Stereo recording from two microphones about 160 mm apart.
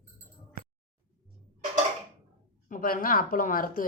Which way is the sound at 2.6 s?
60° left (ahead or behind).